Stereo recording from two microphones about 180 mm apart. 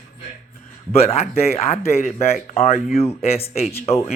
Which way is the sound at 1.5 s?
35° left (ahead or behind).